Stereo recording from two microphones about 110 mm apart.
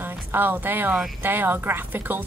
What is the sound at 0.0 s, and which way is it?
A woman's voice, 15° right (ahead or behind).